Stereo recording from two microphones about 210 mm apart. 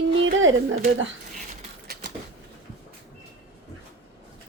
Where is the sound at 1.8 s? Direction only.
50° right (ahead or behind).